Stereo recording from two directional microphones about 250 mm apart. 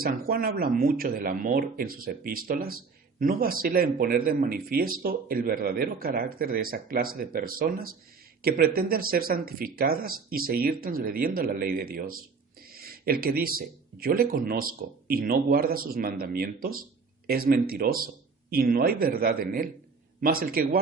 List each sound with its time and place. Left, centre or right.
0.0 s speech: right